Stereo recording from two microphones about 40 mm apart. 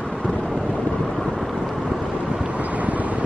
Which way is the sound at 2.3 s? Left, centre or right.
Right.